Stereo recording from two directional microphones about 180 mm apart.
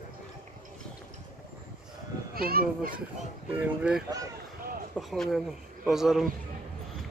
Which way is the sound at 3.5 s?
10° right (ahead or behind).